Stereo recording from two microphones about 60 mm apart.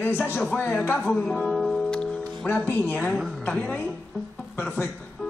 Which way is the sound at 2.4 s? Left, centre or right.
Left.